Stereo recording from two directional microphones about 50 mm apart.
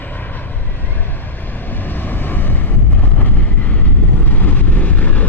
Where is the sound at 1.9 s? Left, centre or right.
Left.